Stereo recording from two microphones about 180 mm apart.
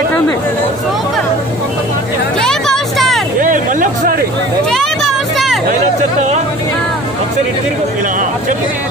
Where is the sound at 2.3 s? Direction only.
5° left (ahead or behind).